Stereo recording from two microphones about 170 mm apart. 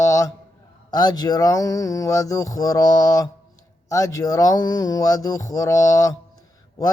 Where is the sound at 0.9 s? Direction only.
25° left (ahead or behind).